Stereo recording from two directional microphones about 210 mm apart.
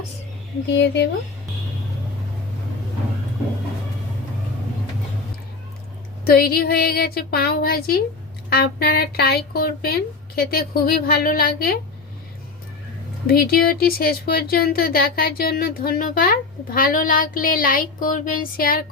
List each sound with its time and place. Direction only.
0.7 s speech: 60° left (ahead or behind)
6.2 s speech: 45° left (ahead or behind)
13.2 s speech: 45° left (ahead or behind)